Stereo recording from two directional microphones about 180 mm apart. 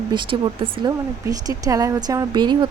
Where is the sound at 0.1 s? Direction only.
30° right (ahead or behind).